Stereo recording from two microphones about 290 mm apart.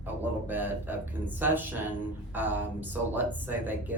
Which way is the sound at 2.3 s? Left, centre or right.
Centre.